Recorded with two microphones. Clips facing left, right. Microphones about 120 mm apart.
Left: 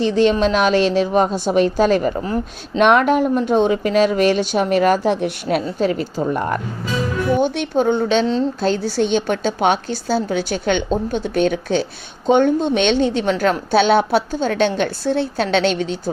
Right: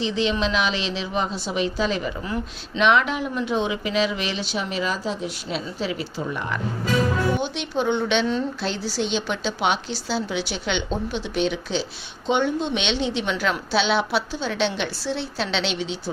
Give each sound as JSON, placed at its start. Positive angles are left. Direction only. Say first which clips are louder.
{"t": 0.0, "sound": "a woman's voice", "louder": "left 8 dB", "side_deg": 50}
{"t": 8.6, "sound": "a woman's voice", "louder": "left 8 dB", "side_deg": 50}